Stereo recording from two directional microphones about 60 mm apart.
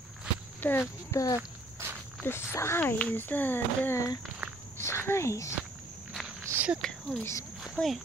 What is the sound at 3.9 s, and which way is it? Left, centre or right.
Speech, left.